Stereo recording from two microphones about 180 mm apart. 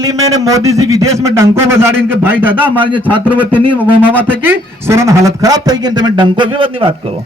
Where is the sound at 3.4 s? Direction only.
10° left (ahead or behind).